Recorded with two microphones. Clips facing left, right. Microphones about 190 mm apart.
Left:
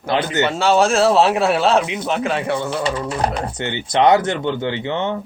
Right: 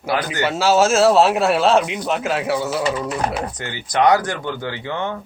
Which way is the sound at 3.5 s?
25° left (ahead or behind).